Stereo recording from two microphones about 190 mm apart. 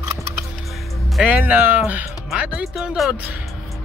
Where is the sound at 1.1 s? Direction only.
5° right (ahead or behind).